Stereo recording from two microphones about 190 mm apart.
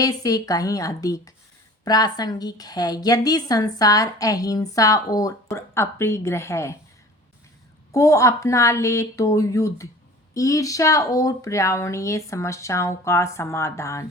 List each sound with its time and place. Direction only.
0.0 s a woman's voice: 20° left (ahead or behind)
7.9 s speech: 15° left (ahead or behind)